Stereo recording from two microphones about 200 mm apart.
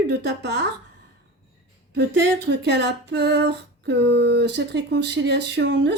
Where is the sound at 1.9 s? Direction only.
60° right (ahead or behind).